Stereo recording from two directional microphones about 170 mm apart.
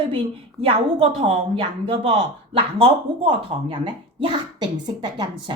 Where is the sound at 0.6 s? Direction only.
35° right (ahead or behind).